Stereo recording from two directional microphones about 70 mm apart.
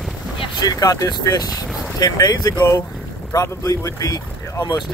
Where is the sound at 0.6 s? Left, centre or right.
Left.